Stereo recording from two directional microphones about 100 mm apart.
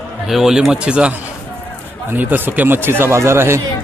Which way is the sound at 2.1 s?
20° right (ahead or behind).